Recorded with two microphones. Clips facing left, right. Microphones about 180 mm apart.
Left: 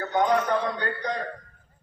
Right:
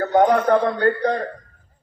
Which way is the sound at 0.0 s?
50° right (ahead or behind).